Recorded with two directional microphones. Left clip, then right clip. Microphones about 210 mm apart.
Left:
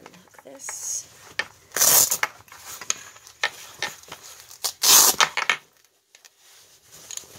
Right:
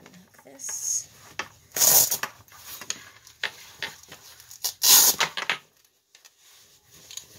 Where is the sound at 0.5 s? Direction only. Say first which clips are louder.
Right 2 dB; 25° left (ahead or behind).